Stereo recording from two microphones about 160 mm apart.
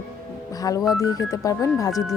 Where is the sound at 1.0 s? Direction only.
20° left (ahead or behind).